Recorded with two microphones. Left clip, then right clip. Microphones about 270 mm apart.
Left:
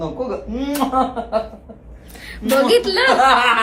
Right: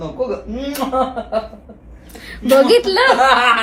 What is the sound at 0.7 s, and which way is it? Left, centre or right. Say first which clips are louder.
Speech: even; centre.